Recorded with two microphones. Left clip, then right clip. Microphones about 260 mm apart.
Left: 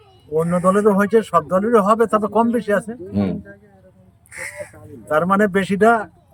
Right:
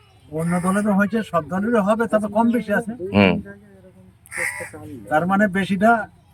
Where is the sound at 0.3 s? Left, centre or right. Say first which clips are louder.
Left 6 dB; centre.